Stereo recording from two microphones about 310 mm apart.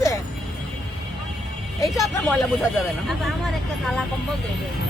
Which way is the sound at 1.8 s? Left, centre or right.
Centre.